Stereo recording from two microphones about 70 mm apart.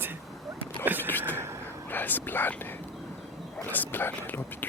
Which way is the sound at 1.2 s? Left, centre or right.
Right.